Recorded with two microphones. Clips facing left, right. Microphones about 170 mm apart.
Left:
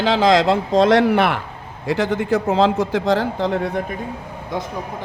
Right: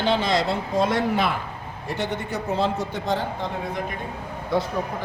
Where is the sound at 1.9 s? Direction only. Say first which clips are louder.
Left 9 dB; 90° left.